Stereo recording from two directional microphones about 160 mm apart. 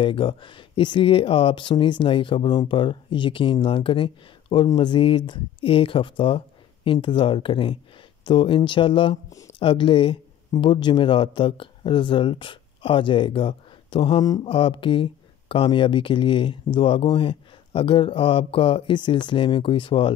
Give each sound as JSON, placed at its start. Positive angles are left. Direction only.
{"t": 0.0, "sound": "speech", "side_deg": 35}